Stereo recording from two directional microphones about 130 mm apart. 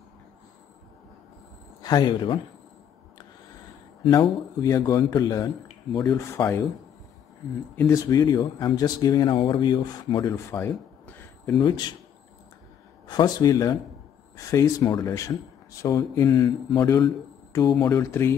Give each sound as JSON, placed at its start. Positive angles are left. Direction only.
{"t": 1.8, "sound": "speech", "side_deg": 35}
{"t": 4.0, "sound": "speech", "side_deg": 35}
{"t": 7.9, "sound": "speech", "side_deg": 30}
{"t": 10.3, "sound": "a sound", "side_deg": 20}
{"t": 11.5, "sound": "speech", "side_deg": 35}
{"t": 13.0, "sound": "speech", "side_deg": 30}